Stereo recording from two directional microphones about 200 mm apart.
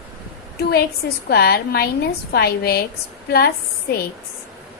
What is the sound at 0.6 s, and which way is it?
A woman's voice, 50° left (ahead or behind).